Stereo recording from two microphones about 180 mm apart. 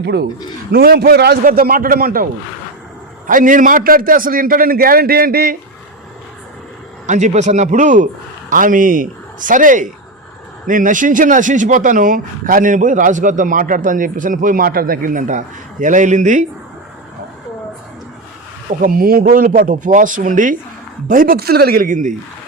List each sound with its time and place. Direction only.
0.0 s a man's voice: 65° right (ahead or behind)
3.2 s speech: 50° right (ahead or behind)
7.1 s speech: 40° right (ahead or behind)
18.8 s speech: 55° right (ahead or behind)